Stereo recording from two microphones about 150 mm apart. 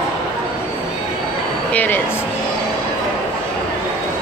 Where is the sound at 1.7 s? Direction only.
10° left (ahead or behind).